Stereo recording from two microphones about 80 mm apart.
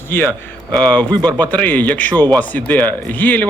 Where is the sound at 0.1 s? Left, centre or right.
Left.